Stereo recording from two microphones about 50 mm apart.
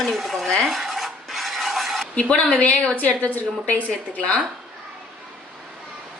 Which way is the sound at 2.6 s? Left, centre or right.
Left.